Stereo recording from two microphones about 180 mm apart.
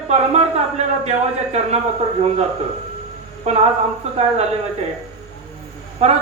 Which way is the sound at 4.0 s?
35° right (ahead or behind).